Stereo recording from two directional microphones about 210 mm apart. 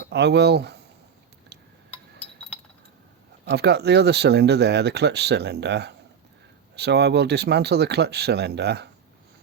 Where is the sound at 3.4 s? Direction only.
50° right (ahead or behind).